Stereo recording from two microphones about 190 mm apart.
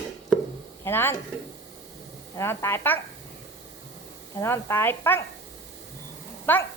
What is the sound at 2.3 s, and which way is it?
Speech, 15° left (ahead or behind).